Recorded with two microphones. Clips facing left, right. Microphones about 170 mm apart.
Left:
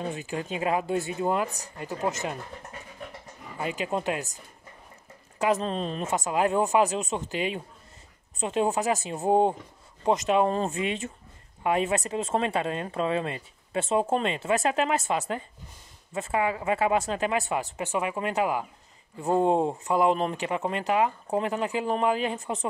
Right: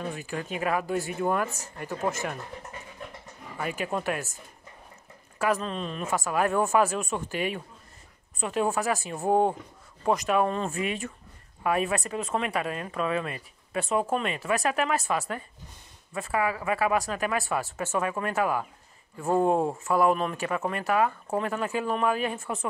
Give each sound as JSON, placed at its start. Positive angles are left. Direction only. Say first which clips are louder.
{"t": 0.0, "sound": "speech", "louder": "left 2 dB", "side_deg": 20}
{"t": 3.5, "sound": "speech", "louder": "left 1 dB", "side_deg": 20}
{"t": 5.6, "sound": "speech", "louder": "left 3 dB", "side_deg": 35}
{"t": 6.0, "sound": "speech", "louder": "even", "side_deg": 20}